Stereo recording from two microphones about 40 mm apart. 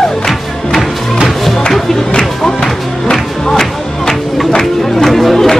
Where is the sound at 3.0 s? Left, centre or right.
Centre.